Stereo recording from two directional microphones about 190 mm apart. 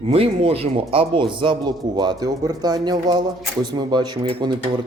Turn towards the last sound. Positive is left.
turn(degrees=-25)  # may be behind; listen again after turning